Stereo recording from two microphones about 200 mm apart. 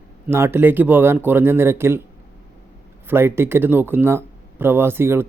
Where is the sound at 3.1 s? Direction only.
10° right (ahead or behind).